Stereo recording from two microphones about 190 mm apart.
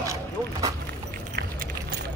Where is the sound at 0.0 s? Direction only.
15° right (ahead or behind).